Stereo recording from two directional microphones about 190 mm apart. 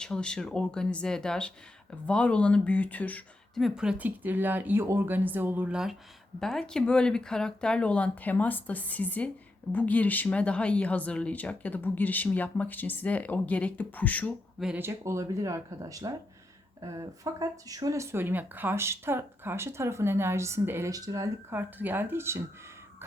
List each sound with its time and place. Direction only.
0.0 s speech: 5° left (ahead or behind)
14.6 s speech: 10° right (ahead or behind)